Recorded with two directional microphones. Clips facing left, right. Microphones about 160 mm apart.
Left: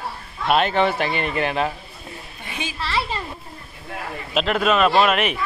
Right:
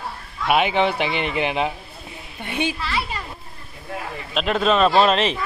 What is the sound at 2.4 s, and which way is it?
Speech, 60° right (ahead or behind).